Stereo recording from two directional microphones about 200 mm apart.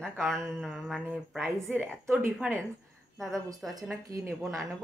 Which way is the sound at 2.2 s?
10° right (ahead or behind).